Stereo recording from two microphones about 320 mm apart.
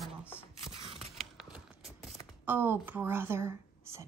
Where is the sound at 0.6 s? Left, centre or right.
Centre.